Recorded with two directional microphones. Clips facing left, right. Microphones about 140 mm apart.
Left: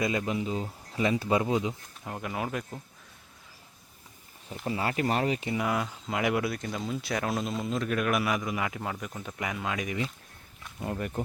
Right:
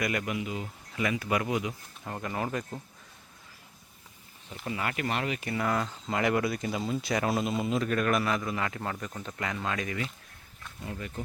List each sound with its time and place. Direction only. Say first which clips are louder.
0.0 s speech: left 2 dB; 25° left (ahead or behind)
2.0 s speech: even; 5° left (ahead or behind)
4.6 s speech: left 3 dB; 30° left (ahead or behind)
5.5 s speech: even; 10° left (ahead or behind)
10.8 s speech: left 6 dB; 55° left (ahead or behind)